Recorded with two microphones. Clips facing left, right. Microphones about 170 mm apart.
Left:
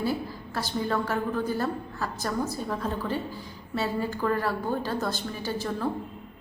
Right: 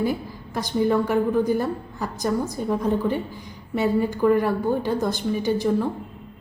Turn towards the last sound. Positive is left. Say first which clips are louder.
# right 8 dB
turn(degrees=-15)  # may be behind; listen again after turning